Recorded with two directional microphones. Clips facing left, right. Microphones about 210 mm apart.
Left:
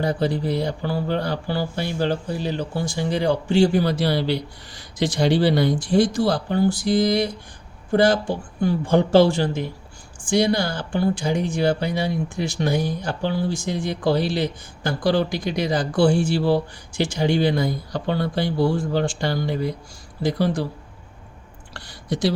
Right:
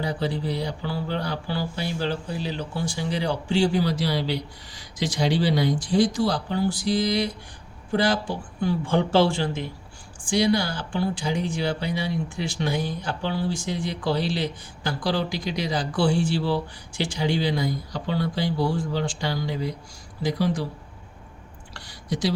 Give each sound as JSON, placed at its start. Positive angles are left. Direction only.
{"t": 0.0, "sound": "speech", "side_deg": 45}
{"t": 21.7, "sound": "speech", "side_deg": 55}